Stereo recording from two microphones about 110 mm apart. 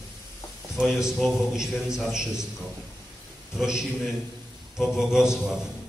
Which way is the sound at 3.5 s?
5° right (ahead or behind).